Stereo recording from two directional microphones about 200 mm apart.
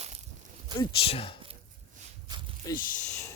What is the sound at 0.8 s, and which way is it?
Speech, 25° left (ahead or behind).